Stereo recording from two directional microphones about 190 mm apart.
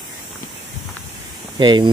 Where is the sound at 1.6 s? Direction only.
25° right (ahead or behind).